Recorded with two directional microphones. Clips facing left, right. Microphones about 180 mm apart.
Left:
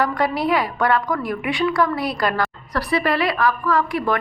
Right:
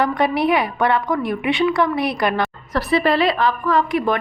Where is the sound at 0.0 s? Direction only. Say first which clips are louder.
Right 2 dB; 25° right (ahead or behind).